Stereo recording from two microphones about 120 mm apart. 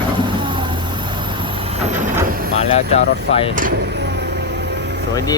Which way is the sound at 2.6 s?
65° left (ahead or behind).